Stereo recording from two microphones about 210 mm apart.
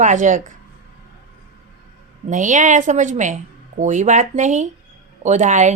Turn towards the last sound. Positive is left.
turn(degrees=-35)  # may be behind; listen again after turning